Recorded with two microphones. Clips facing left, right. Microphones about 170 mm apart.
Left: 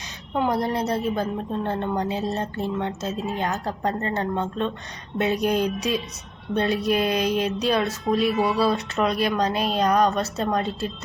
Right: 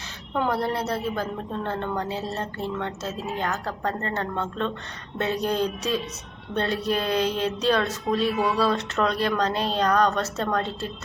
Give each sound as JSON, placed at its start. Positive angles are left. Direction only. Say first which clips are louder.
{"t": 0.3, "sound": "a woman's voice", "louder": "left 2 dB", "side_deg": 15}